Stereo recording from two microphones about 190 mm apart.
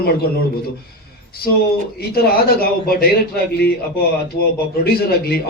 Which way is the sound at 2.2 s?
55° left (ahead or behind).